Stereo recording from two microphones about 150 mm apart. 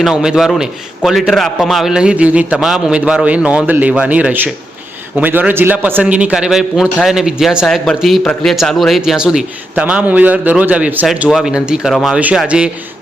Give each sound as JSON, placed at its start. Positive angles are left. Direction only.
{"t": 0.0, "sound": "a man's voice", "side_deg": -5}